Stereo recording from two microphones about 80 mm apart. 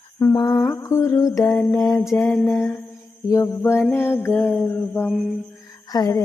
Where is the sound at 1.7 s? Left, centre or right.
Left.